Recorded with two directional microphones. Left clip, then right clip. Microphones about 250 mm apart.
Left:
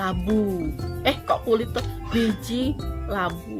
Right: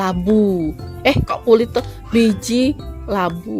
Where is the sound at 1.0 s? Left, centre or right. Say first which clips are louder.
Right 7 dB; right.